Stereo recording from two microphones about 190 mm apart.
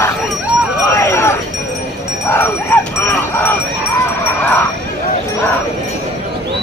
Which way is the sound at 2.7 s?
10° left (ahead or behind).